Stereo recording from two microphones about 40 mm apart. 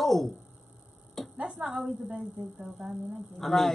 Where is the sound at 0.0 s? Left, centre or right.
Centre.